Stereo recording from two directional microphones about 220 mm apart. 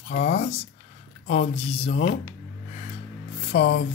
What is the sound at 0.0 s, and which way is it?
A man's voice, 30° left (ahead or behind).